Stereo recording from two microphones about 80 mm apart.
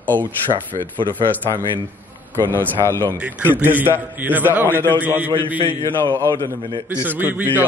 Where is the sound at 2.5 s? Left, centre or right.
Left.